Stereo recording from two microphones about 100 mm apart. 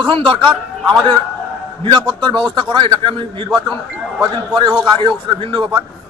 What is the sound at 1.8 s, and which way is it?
A man's voice, 50° right (ahead or behind).